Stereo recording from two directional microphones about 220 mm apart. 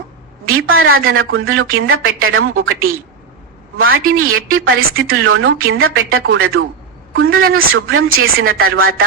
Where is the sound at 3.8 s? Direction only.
70° right (ahead or behind).